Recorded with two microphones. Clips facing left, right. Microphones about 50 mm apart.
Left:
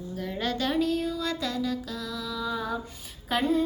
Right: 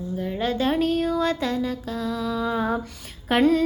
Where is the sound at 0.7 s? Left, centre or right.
Right.